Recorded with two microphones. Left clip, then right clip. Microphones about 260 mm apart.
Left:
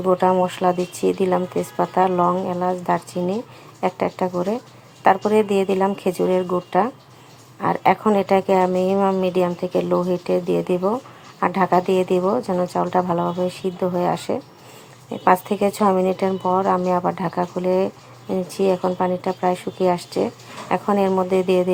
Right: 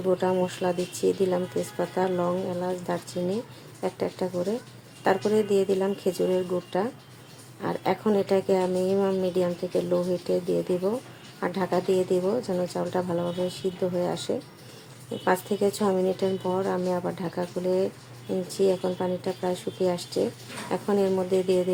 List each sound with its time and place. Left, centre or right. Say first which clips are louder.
0.0 s a woman's voice: left 7 dB; centre
15.6 s a woman's voice: left 5 dB; centre